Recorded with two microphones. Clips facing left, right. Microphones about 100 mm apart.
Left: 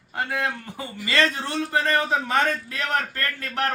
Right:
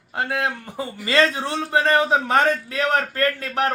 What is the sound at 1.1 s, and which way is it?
A man's voice, 25° right (ahead or behind).